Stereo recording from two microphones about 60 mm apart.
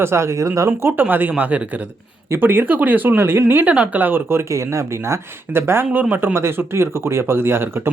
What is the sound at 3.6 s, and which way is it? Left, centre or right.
Speech, right.